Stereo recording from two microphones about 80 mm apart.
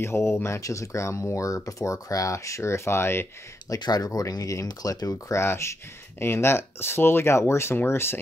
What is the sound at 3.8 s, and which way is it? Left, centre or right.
Speech, left.